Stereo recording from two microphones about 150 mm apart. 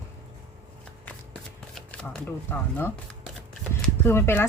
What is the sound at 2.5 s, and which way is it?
Speech, 15° left (ahead or behind).